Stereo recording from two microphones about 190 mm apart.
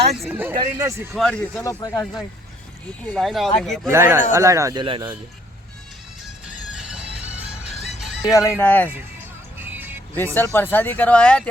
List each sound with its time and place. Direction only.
0.2 s speech: 10° right (ahead or behind)
1.1 s speech: 5° left (ahead or behind)
1.6 s speech: 15° left (ahead or behind); by 3.5 s centre (ahead or behind)
3.9 s speech: 15° right (ahead or behind)
6.7 s music: 5° right (ahead or behind)
8.2 s speech: 15° left (ahead or behind)
9.6 s music: 10° right (ahead or behind)
10.3 s speech: 10° left (ahead or behind)